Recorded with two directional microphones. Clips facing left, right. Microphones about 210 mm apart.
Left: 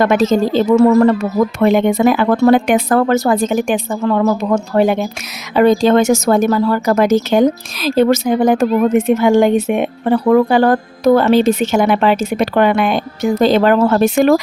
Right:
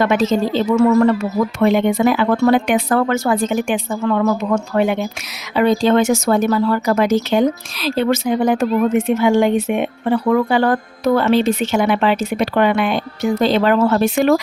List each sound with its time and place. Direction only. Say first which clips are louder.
0.0 s speech: left 3 dB; 45° left (ahead or behind)